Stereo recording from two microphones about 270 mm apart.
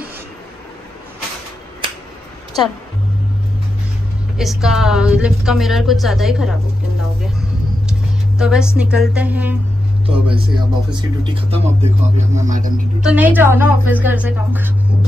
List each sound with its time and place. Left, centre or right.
4.4 s a woman's voice: centre
8.4 s a woman's voice: centre
10.0 s a woman's voice: centre
13.0 s a woman's voice: centre